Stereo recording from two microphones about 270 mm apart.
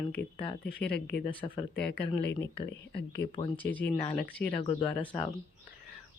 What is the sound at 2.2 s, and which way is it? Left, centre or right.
Speech, left.